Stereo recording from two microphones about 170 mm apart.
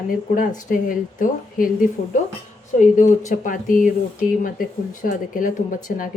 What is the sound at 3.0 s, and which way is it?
Speech, 45° left (ahead or behind).